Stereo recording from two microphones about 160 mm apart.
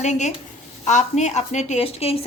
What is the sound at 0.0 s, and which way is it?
A woman's voice, 45° left (ahead or behind).